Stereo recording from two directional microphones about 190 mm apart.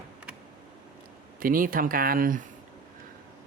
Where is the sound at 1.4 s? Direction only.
50° right (ahead or behind).